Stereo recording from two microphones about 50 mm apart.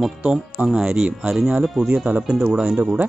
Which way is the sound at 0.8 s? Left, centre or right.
Centre.